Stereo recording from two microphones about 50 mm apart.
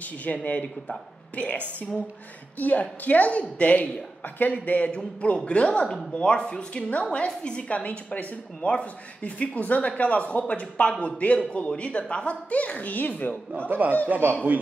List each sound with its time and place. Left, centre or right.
0.0 s a woman's voice: left
2.6 s a woman's voice: left
4.9 s a woman's voice: left
13.7 s speech: right